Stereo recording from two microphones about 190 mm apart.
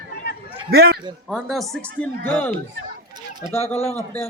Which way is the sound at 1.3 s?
Centre (ahead or behind).